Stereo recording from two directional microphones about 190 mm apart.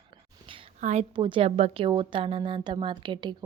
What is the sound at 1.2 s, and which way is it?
A woman's voice, 25° right (ahead or behind).